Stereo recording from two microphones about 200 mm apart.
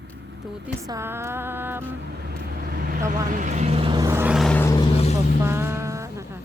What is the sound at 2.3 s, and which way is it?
Vehicle, 50° right (ahead or behind).